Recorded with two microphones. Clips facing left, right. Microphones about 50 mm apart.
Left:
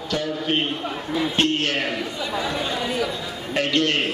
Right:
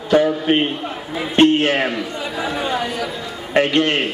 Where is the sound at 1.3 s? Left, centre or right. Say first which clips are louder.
Right 11 dB; right.